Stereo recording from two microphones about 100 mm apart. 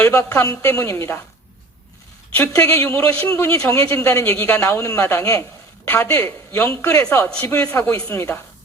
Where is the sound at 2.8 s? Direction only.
30° left (ahead or behind).